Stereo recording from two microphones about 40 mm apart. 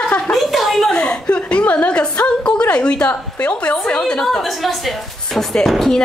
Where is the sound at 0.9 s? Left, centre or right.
Left.